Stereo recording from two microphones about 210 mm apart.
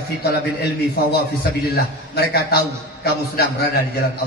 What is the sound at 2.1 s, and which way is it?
Speech, 50° left (ahead or behind).